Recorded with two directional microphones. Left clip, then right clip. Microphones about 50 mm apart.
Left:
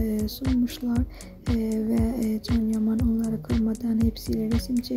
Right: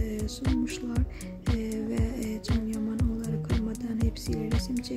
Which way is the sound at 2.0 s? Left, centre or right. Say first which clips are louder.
Left 6 dB; left.